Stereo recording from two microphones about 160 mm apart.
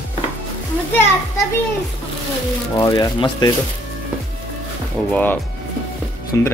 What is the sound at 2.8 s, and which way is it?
Speech, 20° left (ahead or behind).